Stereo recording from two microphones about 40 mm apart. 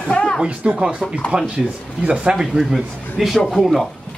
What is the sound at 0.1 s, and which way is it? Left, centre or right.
Speech, left.